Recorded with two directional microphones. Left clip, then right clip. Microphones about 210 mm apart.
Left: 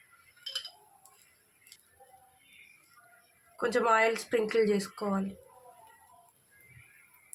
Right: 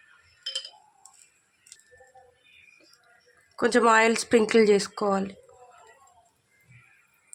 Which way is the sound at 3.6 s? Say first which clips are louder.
Right 6 dB; 55° right (ahead or behind).